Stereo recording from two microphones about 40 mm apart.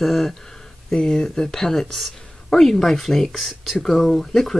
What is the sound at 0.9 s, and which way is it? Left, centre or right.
Speech, centre.